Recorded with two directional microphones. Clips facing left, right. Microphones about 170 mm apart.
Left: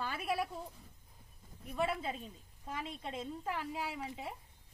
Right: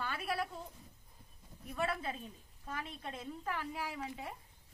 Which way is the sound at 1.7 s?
20° left (ahead or behind).